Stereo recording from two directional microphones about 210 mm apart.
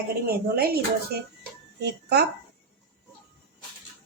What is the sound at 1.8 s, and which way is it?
Speech, 50° right (ahead or behind).